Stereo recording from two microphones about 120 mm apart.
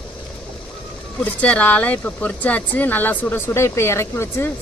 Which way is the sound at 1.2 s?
10° left (ahead or behind).